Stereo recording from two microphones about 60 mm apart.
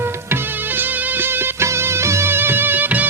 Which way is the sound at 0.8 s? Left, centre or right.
Right.